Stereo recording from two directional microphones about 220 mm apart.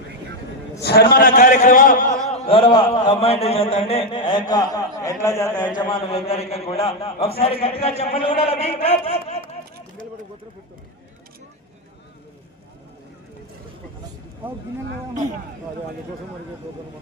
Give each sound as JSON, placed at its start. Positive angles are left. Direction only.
{"t": 0.8, "sound": "a man's voice", "side_deg": 45}
{"t": 2.5, "sound": "a man's voice", "side_deg": 25}
{"t": 5.9, "sound": "a man's voice", "side_deg": 25}
{"t": 8.8, "sound": "a sound", "side_deg": 30}